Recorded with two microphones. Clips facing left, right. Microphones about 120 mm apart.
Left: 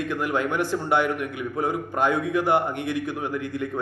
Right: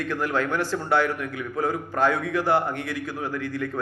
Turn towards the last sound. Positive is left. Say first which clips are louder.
# left 1 dB
turn(degrees=20)  # may be behind; listen again after turning